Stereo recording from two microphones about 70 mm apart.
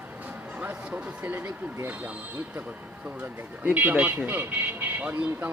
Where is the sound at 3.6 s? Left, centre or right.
Right.